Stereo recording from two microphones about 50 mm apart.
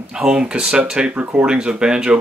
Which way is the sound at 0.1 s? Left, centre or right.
Centre.